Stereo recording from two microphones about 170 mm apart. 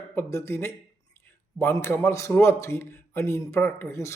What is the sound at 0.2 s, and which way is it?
A man's voice, 15° left (ahead or behind).